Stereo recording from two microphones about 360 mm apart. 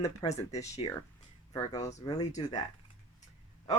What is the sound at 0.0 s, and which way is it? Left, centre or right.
Speech, centre.